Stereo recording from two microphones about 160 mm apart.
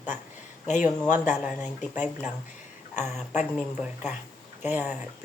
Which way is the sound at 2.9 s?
45° left (ahead or behind).